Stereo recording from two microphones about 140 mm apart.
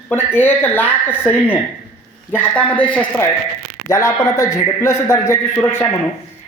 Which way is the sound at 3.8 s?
20° left (ahead or behind).